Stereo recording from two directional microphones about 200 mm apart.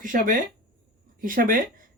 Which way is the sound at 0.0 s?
40° right (ahead or behind).